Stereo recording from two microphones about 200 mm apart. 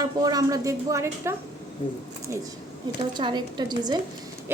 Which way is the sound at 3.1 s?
20° right (ahead or behind).